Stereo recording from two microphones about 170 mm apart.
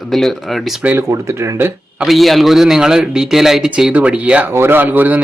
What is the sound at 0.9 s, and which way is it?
Speech, 15° right (ahead or behind).